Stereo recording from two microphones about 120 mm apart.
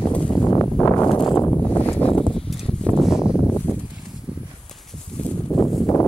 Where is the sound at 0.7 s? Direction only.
10° left (ahead or behind).